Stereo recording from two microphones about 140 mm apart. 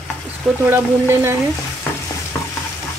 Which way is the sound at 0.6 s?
15° right (ahead or behind).